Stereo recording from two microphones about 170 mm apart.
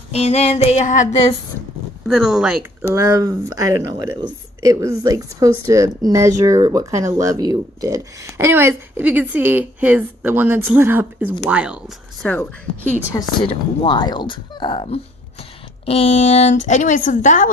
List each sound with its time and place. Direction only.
0.1 s female singing: 35° left (ahead or behind)
2.0 s speech: centre (ahead or behind)
2.9 s speech: 20° right (ahead or behind); by 12.3 s 5° right (ahead or behind)
12.3 s a woman's voice: 10° left (ahead or behind)
13.1 s a woman's voice: 30° left (ahead or behind); by 17.5 s 50° left (ahead or behind)